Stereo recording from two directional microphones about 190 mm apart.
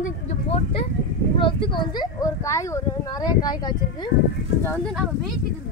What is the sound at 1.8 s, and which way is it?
Speech, 20° left (ahead or behind).